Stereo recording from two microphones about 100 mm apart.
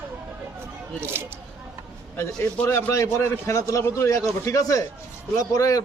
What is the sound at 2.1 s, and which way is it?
A man's voice, 25° left (ahead or behind).